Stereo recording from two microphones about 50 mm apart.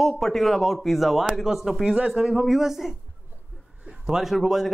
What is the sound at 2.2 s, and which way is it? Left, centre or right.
Speech, centre.